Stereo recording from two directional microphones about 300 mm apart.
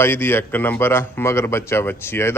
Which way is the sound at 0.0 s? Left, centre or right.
Centre.